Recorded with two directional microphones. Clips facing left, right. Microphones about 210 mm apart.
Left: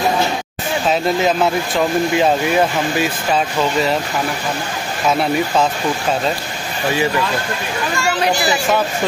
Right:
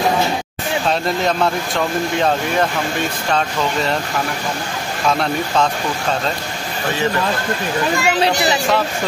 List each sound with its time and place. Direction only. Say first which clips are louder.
0.8 s speech: left 3 dB; 5° left (ahead or behind)
8.0 s a child's voice: left 2 dB; 20° right (ahead or behind)